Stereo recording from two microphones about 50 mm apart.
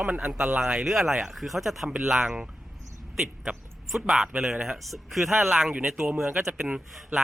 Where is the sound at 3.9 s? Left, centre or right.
Centre.